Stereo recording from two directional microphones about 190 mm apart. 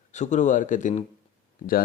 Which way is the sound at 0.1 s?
40° left (ahead or behind).